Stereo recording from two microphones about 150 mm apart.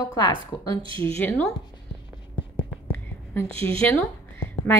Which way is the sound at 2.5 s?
10° left (ahead or behind).